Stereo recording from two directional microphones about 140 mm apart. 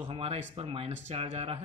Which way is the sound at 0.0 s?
45° right (ahead or behind).